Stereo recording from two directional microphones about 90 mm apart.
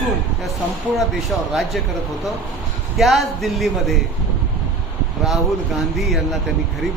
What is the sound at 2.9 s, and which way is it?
A man's voice, centre (ahead or behind).